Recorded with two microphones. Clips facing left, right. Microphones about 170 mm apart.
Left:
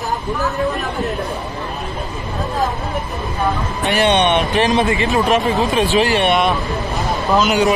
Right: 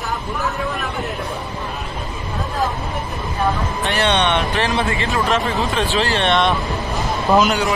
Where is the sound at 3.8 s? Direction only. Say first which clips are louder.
Left 4 dB; 15° left (ahead or behind).